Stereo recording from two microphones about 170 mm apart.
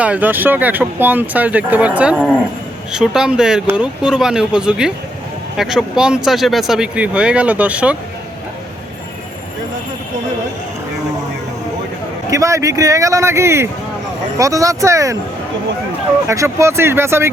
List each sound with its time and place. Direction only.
0.0 s speech: 10° right (ahead or behind)
12.3 s a man's voice: 20° right (ahead or behind)
16.2 s speech: 15° right (ahead or behind)